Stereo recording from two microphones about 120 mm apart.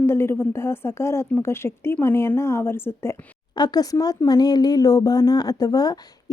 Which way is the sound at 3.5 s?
35° left (ahead or behind).